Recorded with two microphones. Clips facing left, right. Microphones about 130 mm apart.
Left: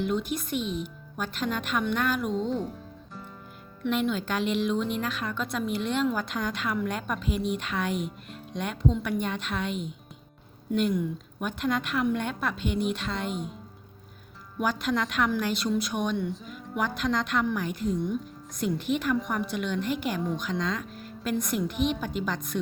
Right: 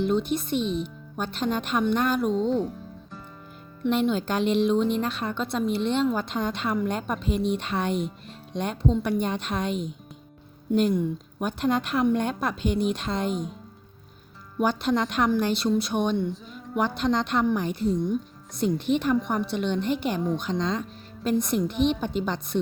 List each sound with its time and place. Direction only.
0.0 s speech: 30° right (ahead or behind)
2.3 s speech: centre (ahead or behind)
3.8 s speech: 35° right (ahead or behind)
14.6 s speech: 30° right (ahead or behind)
16.3 s music: centre (ahead or behind)
16.7 s speech: 30° right (ahead or behind)
19.5 s speech: 30° right (ahead or behind)